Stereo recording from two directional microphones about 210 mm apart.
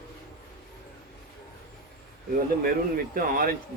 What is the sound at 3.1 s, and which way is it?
Speech, 45° right (ahead or behind).